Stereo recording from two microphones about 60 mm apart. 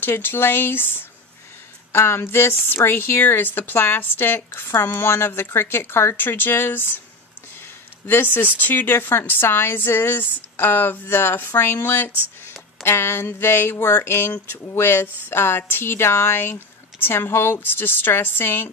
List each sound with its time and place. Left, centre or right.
0.0 s speech: left
8.1 s speech: left
12.8 s a sound: left
14.7 s speech: left